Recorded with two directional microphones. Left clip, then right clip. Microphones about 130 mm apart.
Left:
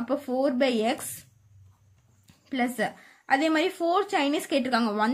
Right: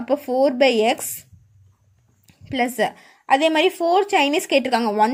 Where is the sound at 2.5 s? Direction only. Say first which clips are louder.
Right 7 dB; 40° right (ahead or behind).